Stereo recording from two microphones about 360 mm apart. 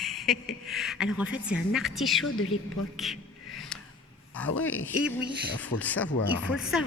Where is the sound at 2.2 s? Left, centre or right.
Left.